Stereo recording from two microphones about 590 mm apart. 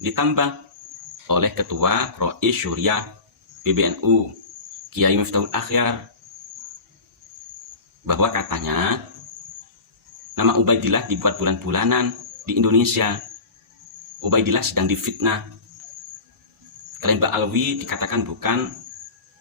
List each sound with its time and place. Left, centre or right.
0.0 s speech: right
8.0 s speech: right
10.3 s speech: right
14.3 s speech: right
17.0 s speech: right